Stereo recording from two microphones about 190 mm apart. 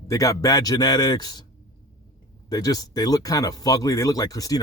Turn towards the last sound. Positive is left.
turn(degrees=20)  # may be behind; listen again after turning